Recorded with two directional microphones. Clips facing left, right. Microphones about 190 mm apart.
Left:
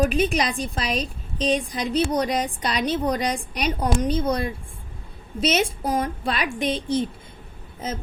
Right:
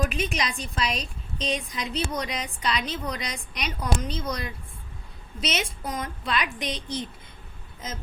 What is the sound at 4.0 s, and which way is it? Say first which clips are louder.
Speech: left 9 dB; 55° left (ahead or behind).